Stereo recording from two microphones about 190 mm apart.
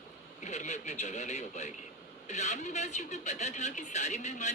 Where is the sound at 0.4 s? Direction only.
40° left (ahead or behind).